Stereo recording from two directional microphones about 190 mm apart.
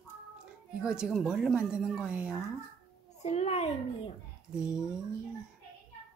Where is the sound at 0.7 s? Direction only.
5° right (ahead or behind).